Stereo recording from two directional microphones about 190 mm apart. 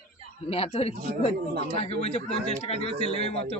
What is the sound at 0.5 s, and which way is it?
Speech, 30° left (ahead or behind).